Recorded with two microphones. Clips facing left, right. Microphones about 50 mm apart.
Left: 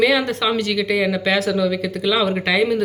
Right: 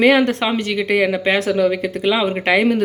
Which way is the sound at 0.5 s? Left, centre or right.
Right.